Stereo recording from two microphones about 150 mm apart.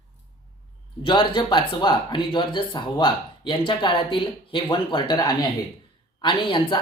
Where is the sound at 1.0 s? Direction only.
30° left (ahead or behind).